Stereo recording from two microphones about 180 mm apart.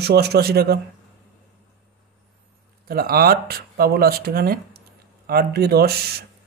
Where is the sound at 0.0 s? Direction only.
65° right (ahead or behind).